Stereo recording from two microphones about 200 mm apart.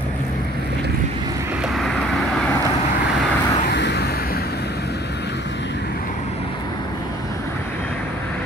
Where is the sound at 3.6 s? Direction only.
55° left (ahead or behind).